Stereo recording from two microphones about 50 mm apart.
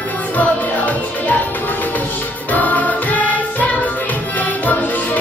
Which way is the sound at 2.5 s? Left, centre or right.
Left.